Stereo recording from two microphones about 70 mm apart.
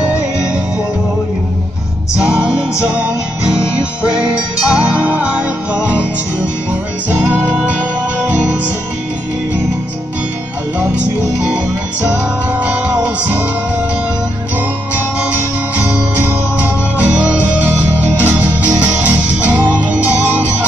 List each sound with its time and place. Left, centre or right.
0.0 s music: centre
2.1 s music: centre
6.7 s music: right
12.5 s music: right
15.8 s music: right